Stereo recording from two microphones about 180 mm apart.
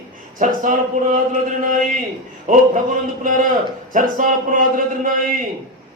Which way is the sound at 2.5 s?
45° right (ahead or behind).